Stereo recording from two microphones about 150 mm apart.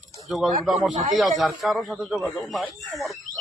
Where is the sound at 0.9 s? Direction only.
55° right (ahead or behind).